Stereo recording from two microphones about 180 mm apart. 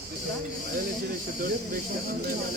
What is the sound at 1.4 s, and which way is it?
Speech, 55° right (ahead or behind).